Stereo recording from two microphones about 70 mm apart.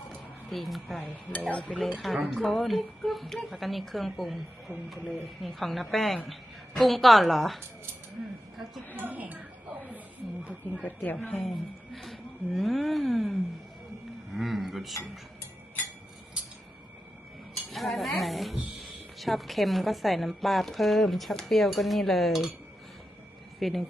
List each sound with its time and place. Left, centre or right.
0.1 s a sound: centre
1.0 s speech: left
2.3 s a woman's voice: centre
9.0 s speech: right
10.8 s speech: left
11.3 s a woman's voice: centre
17.5 s a woman's voice: centre
23.6 s speech: centre